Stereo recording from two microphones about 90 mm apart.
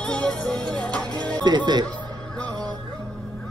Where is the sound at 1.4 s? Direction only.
55° right (ahead or behind).